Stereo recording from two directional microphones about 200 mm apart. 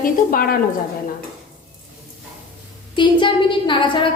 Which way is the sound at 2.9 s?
25° left (ahead or behind).